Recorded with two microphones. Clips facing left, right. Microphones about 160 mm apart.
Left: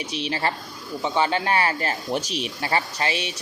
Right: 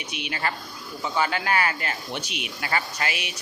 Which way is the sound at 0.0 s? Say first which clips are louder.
Left 4 dB; 35° left (ahead or behind).